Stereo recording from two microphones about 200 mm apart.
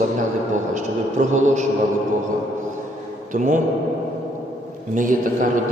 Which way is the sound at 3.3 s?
40° right (ahead or behind).